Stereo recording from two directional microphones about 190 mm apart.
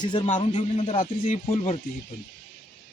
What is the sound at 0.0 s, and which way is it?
A man's voice, 20° left (ahead or behind).